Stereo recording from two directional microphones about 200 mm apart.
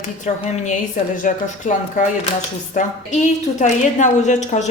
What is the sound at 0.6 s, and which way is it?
A woman's voice, 40° left (ahead or behind).